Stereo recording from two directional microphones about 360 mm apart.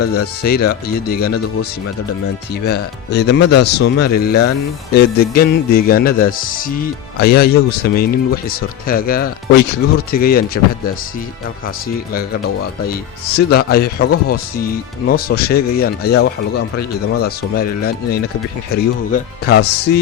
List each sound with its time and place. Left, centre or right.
0.0 s speech: left
0.9 s speech: left
3.1 s speech: left
12.9 s speech: left